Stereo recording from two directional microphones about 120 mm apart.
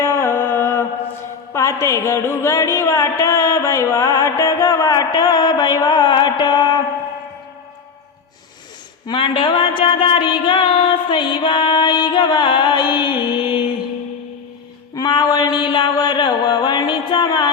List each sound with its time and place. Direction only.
0.0 s music: 25° left (ahead or behind)
1.5 s speech: 25° left (ahead or behind)
9.0 s music: 45° left (ahead or behind)
14.9 s mantra: 35° left (ahead or behind)